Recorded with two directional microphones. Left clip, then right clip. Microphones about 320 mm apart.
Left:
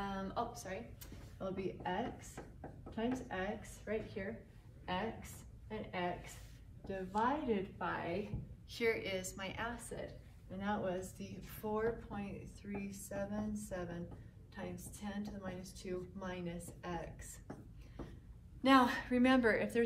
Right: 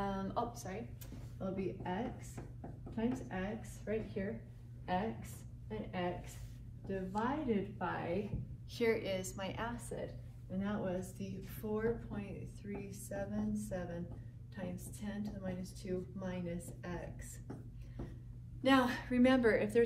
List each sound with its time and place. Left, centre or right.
0.0 s a sound: centre
1.4 s a woman's voice: centre
8.7 s a woman's voice: centre
18.6 s a woman's voice: centre